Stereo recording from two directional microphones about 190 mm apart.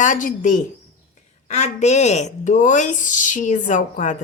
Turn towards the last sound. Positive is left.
turn(degrees=40)  # may be behind; listen again after turning